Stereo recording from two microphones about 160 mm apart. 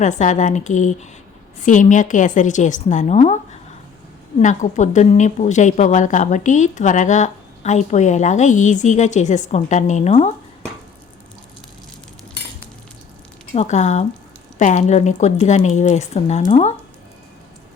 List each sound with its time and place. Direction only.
0.0 s a woman's voice: 50° left (ahead or behind)
13.6 s a woman's voice: 45° left (ahead or behind)